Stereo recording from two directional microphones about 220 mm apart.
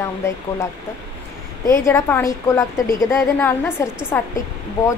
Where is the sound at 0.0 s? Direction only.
10° left (ahead or behind).